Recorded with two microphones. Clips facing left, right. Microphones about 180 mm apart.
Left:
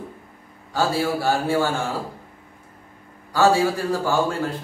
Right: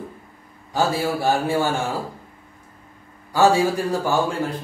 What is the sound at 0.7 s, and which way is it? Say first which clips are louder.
Speech: even; 15° right (ahead or behind).